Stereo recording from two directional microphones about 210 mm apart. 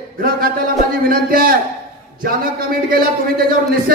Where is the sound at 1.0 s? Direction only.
45° right (ahead or behind).